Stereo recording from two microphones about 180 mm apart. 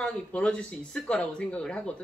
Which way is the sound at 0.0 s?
5° left (ahead or behind).